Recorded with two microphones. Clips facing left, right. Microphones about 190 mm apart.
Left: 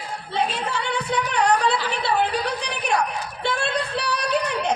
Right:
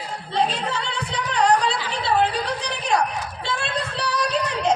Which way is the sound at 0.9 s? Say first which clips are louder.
Left 4 dB; 60° left (ahead or behind).